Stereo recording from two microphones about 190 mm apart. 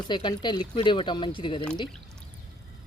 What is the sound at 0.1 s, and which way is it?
Speech, 25° left (ahead or behind).